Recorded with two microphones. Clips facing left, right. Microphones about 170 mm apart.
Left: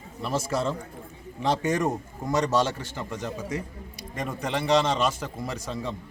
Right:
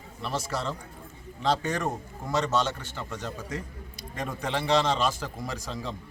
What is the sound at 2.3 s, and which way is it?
A man's voice, 10° left (ahead or behind).